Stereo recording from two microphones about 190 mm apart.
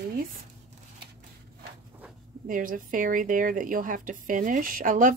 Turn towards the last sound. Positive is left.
turn(degrees=-45)  # may be behind; listen again after turning